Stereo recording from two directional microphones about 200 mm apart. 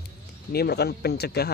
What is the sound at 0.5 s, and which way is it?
Speech, 55° left (ahead or behind).